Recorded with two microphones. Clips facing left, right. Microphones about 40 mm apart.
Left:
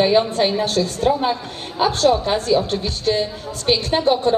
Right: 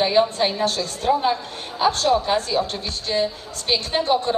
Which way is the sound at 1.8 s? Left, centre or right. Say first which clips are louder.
Left 2 dB; centre.